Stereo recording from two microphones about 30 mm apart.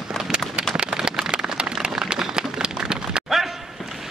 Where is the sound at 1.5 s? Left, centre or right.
Right.